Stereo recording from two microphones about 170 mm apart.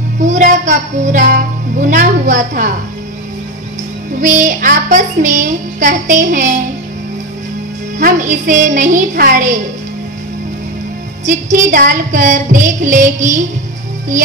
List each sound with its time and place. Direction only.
0.2 s music: 45° right (ahead or behind)
4.2 s music: 50° right (ahead or behind)
8.0 s music: 50° right (ahead or behind)
11.7 s music: 50° right (ahead or behind)